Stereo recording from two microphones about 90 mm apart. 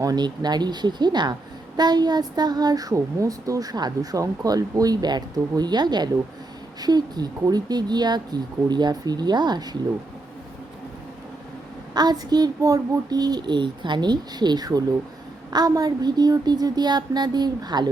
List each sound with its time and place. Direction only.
0.0 s a woman's voice: 45° right (ahead or behind)
11.9 s a woman's voice: 50° right (ahead or behind)